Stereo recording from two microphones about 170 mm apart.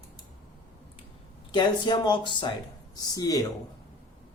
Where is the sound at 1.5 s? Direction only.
25° left (ahead or behind).